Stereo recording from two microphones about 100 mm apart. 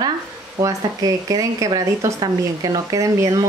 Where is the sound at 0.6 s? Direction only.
35° right (ahead or behind).